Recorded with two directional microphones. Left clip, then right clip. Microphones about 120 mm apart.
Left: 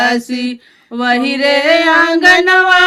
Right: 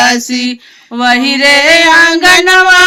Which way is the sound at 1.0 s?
15° right (ahead or behind).